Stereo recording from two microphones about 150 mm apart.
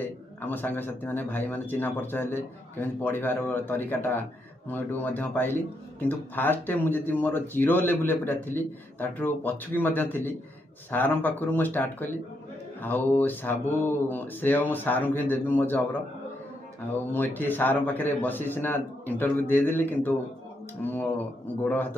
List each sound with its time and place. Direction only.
0.0 s speech: 10° left (ahead or behind)
17.1 s speech: 15° left (ahead or behind)